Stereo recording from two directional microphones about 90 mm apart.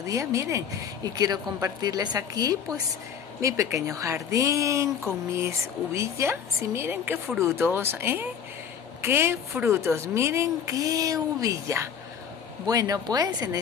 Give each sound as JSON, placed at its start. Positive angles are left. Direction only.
{"t": 0.0, "sound": "speech", "side_deg": -35}
{"t": 1.0, "sound": "a woman's voice", "side_deg": -50}